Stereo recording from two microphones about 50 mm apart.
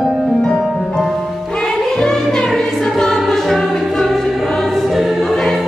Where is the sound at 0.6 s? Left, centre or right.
Centre.